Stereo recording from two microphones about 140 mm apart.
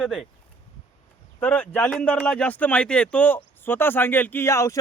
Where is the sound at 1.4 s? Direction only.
10° left (ahead or behind).